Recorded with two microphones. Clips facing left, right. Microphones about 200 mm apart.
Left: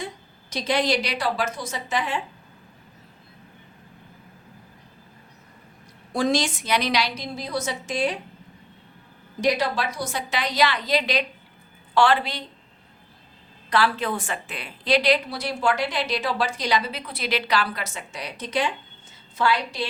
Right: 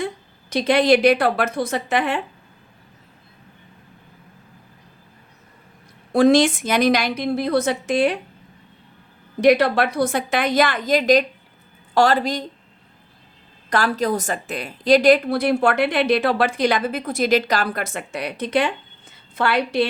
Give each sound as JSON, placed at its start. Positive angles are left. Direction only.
{"t": 0.5, "sound": "a woman's voice", "side_deg": -60}
{"t": 6.1, "sound": "a woman's voice", "side_deg": -60}
{"t": 9.4, "sound": "a woman's voice", "side_deg": -60}
{"t": 13.7, "sound": "a woman's voice", "side_deg": -45}